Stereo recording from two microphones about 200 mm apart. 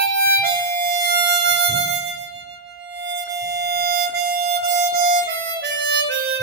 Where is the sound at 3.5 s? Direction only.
55° right (ahead or behind).